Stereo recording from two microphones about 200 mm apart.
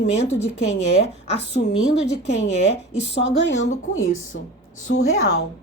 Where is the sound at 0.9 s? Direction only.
30° left (ahead or behind).